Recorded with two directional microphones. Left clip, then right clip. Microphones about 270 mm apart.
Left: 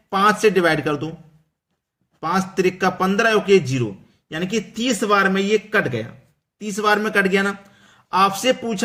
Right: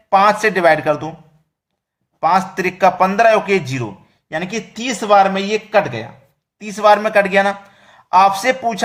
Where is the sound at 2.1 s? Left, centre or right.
Centre.